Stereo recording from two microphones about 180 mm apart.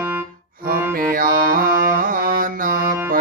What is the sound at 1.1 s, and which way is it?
Music, 50° right (ahead or behind).